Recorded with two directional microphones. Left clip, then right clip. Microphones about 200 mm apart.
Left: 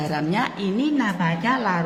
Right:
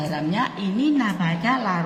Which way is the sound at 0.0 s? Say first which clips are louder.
Left 1 dB; 30° left (ahead or behind).